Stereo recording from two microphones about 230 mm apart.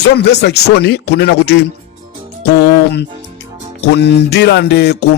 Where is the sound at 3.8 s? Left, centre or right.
Left.